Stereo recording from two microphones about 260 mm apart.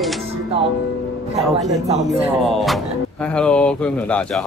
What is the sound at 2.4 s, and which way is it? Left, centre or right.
Speech, centre.